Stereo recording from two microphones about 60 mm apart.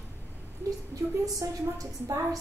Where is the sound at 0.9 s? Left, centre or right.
Right.